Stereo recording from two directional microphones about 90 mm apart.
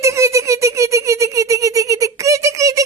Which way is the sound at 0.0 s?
35° right (ahead or behind).